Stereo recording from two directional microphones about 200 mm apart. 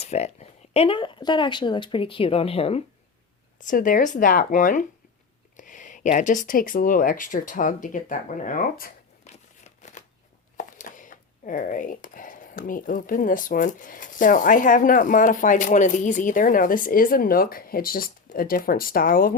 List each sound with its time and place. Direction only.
0.0 s speech: 35° left (ahead or behind)
3.6 s speech: 40° left (ahead or behind)